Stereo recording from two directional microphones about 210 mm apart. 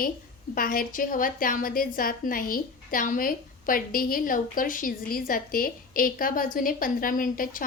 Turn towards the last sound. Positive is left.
turn(degrees=40)  # may be behind; listen again after turning